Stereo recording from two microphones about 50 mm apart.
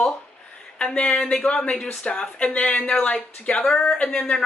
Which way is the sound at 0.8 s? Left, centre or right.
Left.